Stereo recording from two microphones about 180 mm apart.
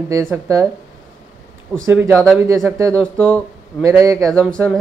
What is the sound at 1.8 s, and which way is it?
Speech, 10° right (ahead or behind).